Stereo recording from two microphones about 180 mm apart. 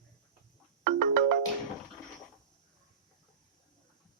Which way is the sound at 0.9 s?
55° right (ahead or behind).